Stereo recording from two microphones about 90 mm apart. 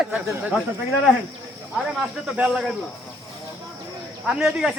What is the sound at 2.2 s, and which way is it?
Speech, 10° right (ahead or behind).